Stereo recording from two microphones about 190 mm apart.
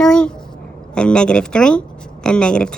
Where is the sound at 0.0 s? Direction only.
5° left (ahead or behind).